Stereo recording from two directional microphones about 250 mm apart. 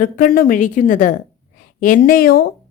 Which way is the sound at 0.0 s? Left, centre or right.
Left.